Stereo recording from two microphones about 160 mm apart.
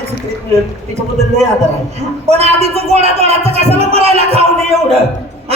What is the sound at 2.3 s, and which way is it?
A man's voice, 40° right (ahead or behind).